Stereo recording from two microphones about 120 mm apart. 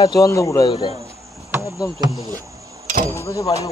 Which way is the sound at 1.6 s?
25° left (ahead or behind).